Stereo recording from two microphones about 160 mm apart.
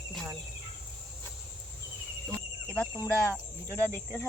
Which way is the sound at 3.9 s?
15° left (ahead or behind).